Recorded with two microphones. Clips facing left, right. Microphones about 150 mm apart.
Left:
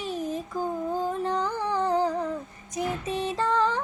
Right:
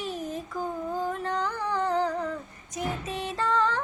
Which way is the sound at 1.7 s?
10° left (ahead or behind).